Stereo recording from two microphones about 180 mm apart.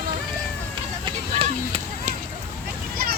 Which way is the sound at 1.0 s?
35° right (ahead or behind).